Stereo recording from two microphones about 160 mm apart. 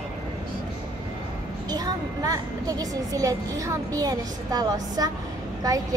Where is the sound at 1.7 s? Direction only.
20° right (ahead or behind).